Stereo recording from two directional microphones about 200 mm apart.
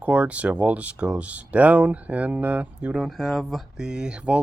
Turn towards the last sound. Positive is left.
turn(degrees=-5)  # may be behind; listen again after turning